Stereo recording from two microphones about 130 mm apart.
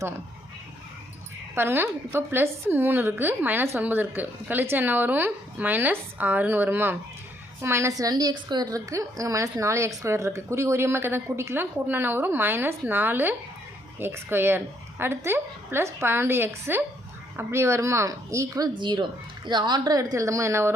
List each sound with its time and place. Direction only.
1.5 s a woman's voice: 15° right (ahead or behind)
18.8 s a woman's voice: 35° right (ahead or behind); by 20.7 s 20° right (ahead or behind)